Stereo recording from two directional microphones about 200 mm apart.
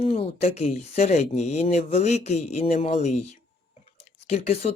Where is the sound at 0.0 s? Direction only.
30° left (ahead or behind).